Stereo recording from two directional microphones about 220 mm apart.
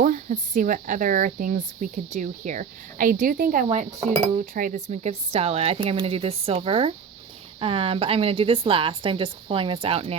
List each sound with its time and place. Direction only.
0.0 s speech: 35° right (ahead or behind)